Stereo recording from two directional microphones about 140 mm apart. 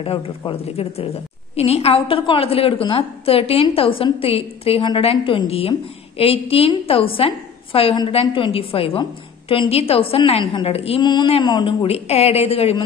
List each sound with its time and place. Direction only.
0.0 s a woman's voice: 40° left (ahead or behind)